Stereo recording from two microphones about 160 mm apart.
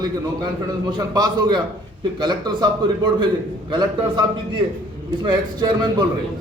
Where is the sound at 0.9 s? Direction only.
25° right (ahead or behind).